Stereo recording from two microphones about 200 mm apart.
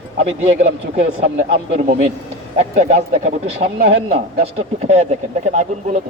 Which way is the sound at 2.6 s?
35° right (ahead or behind).